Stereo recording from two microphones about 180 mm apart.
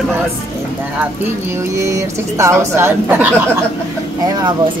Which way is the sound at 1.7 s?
15° right (ahead or behind).